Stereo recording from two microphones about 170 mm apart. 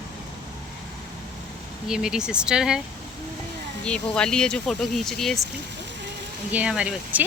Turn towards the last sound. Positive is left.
turn(degrees=-5)  # may be behind; listen again after turning